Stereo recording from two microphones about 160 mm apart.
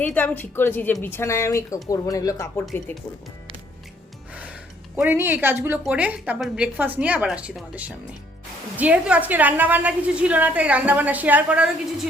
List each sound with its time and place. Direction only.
0.0 s speech: 10° left (ahead or behind)
4.9 s a woman's voice: 10° right (ahead or behind)